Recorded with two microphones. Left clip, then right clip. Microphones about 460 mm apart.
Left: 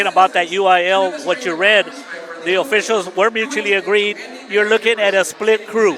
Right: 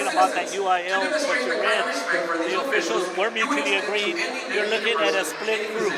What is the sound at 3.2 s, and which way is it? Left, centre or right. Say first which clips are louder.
A man's voice: left 6 dB; left.